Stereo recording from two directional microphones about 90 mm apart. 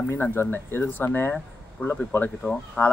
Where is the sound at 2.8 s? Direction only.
5° left (ahead or behind).